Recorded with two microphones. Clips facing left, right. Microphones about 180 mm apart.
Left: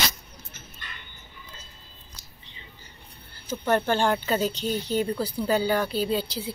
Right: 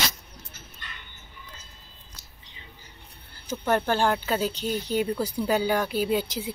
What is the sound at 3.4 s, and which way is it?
Speech, 10° right (ahead or behind).